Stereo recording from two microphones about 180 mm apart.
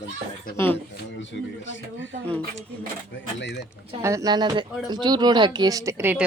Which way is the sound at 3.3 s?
75° left (ahead or behind).